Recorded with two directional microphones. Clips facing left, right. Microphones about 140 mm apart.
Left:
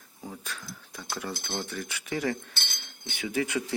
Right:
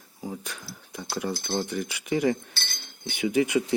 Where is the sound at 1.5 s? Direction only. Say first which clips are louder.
Right 6 dB; 15° right (ahead or behind).